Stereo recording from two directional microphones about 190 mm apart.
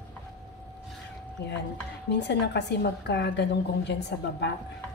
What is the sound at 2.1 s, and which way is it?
A woman's voice, 65° left (ahead or behind).